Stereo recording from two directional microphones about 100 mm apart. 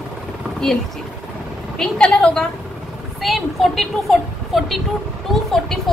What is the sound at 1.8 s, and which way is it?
A woman's voice, 10° left (ahead or behind).